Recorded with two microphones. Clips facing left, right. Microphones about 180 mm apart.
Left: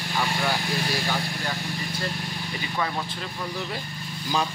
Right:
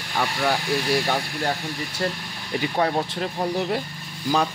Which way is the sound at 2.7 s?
50° right (ahead or behind).